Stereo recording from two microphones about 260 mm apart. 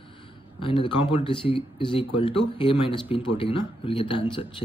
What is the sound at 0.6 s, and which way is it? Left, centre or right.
Speech, centre.